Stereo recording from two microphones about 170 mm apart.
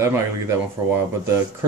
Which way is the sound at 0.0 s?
15° right (ahead or behind).